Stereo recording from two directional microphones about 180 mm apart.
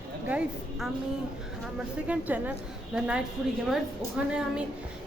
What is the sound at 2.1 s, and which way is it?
A woman's voice, 10° right (ahead or behind).